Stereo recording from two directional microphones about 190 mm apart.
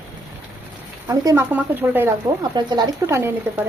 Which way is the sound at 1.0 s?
15° right (ahead or behind).